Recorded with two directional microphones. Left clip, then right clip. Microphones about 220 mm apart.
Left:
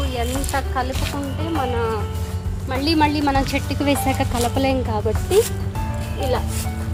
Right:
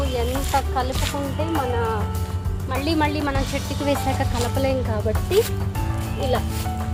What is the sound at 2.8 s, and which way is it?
Speech, 40° left (ahead or behind).